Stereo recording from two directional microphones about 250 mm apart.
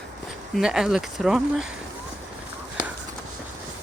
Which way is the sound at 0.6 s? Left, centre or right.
Centre.